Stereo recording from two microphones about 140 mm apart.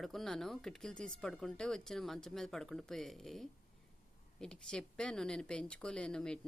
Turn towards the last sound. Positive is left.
turn(degrees=5)  # may be behind; listen again after turning